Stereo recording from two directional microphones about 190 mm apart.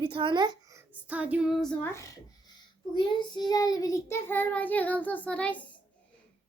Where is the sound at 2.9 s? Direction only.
25° left (ahead or behind); by 5.6 s 5° left (ahead or behind).